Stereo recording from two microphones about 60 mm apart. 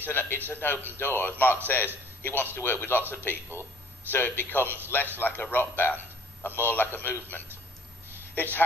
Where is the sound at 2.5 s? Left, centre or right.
Left.